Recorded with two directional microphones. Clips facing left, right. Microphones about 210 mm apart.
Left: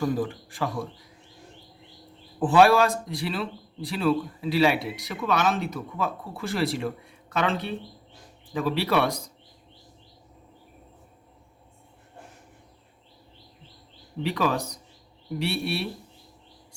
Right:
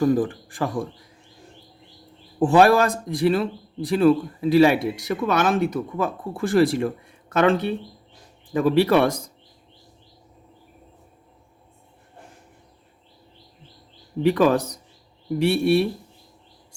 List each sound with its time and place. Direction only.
0.0 s speech: 50° right (ahead or behind)
2.4 s speech: 45° right (ahead or behind)
14.2 s speech: 50° right (ahead or behind)